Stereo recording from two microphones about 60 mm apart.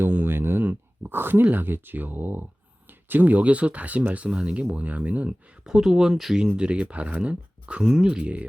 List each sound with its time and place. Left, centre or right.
0.0 s a sound: right
3.1 s speech: right
5.6 s speech: centre